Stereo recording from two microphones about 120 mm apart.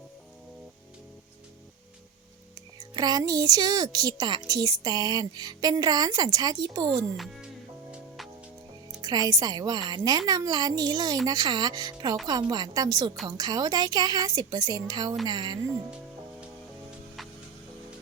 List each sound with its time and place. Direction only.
2.7 s speech: 35° right (ahead or behind)
7.9 s music: centre (ahead or behind)
9.0 s speech: 35° right (ahead or behind)